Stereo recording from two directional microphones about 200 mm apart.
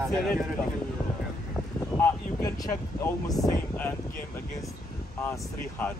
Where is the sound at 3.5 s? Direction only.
10° left (ahead or behind).